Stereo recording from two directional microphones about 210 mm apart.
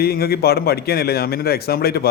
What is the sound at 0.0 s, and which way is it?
A man's voice, 45° left (ahead or behind).